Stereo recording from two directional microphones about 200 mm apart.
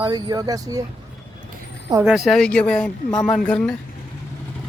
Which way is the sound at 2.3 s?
5° left (ahead or behind).